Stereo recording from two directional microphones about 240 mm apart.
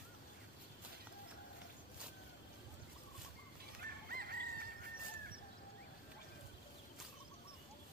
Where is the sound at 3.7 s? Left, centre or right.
Right.